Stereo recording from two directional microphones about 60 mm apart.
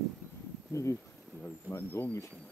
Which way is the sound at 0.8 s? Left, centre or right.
Left.